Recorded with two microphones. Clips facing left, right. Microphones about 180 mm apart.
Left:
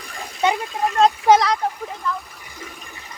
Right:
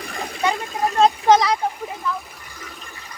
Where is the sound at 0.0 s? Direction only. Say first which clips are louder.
Right 5 dB; 75° right (ahead or behind).